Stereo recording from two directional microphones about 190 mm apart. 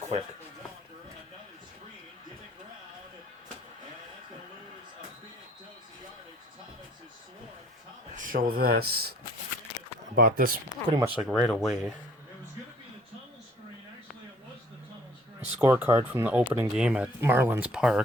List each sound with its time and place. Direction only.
8.1 s speech: 45° right (ahead or behind)
10.2 s speech: 50° right (ahead or behind)
10.8 s speech: 30° right (ahead or behind)
11.2 s speech: 5° left (ahead or behind)
15.5 s speech: 10° right (ahead or behind)